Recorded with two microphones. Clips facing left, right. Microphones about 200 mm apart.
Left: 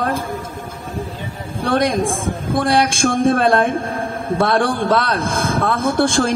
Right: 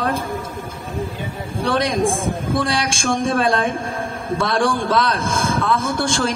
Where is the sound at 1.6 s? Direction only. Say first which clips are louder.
Left 2 dB; 55° left (ahead or behind).